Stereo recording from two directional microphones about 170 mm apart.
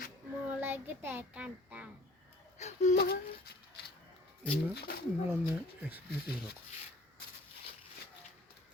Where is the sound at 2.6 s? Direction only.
40° left (ahead or behind).